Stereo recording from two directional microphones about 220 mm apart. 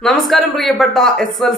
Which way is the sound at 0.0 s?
Centre (ahead or behind).